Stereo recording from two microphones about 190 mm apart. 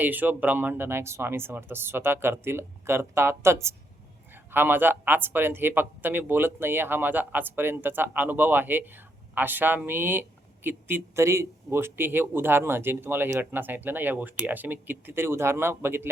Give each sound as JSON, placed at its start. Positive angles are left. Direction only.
{"t": 0.0, "sound": "speech", "side_deg": -10}